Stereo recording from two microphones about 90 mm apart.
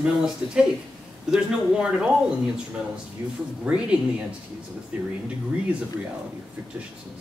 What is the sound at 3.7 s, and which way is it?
Speech, 15° right (ahead or behind).